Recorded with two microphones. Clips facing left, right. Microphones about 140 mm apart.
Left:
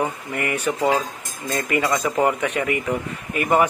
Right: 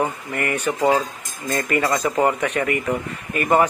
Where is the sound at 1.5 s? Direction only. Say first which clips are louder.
Right 1 dB; 10° left (ahead or behind).